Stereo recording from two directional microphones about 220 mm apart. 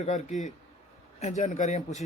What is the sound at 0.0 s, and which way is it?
A man's voice, 35° left (ahead or behind).